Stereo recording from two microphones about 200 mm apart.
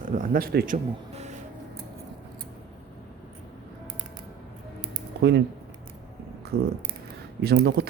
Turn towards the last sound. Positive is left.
turn(degrees=-55)  # may be behind; listen again after turning